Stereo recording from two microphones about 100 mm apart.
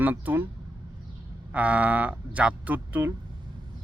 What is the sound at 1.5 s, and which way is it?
Speech, 15° right (ahead or behind).